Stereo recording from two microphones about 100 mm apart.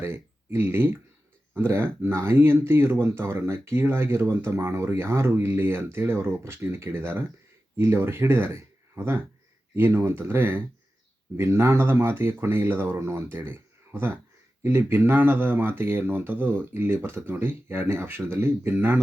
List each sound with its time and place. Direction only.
0.0 s speech: 25° right (ahead or behind)